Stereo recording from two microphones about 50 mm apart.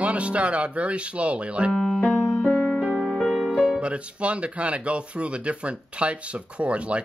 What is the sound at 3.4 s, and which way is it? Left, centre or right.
Speech, centre.